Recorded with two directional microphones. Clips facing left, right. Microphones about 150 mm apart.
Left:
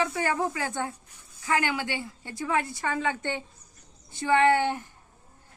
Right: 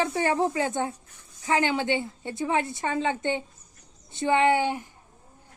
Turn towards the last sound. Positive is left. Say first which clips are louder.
# even
turn(degrees=-15)  # may be behind; listen again after turning